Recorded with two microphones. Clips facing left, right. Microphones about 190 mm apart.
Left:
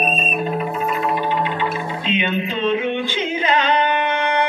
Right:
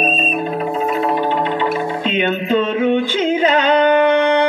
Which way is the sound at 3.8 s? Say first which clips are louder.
Right 8 dB; 35° right (ahead or behind).